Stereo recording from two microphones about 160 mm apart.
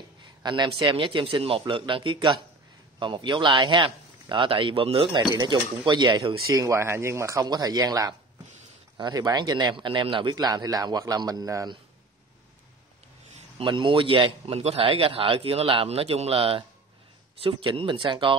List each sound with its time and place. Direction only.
0.4 s a man's voice: 30° right (ahead or behind)
13.4 s a man's voice: 35° right (ahead or behind)